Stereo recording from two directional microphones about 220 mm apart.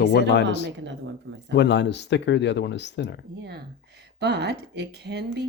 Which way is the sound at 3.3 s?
50° right (ahead or behind).